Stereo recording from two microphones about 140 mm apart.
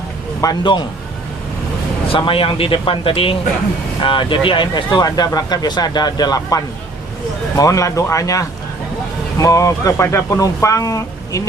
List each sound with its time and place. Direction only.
0.4 s speech: 30° left (ahead or behind)
2.0 s a man's voice: 40° left (ahead or behind); by 11.4 s 25° left (ahead or behind)